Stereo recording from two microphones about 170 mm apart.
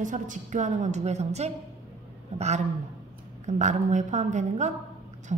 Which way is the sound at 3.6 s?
45° right (ahead or behind).